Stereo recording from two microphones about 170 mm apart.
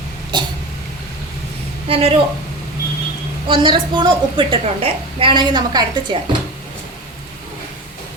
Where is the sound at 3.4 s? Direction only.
30° right (ahead or behind).